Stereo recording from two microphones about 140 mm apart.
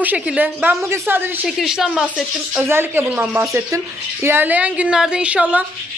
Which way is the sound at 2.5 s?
15° right (ahead or behind).